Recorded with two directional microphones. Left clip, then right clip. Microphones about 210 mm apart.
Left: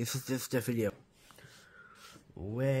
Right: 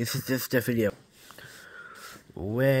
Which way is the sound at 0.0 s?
10° right (ahead or behind).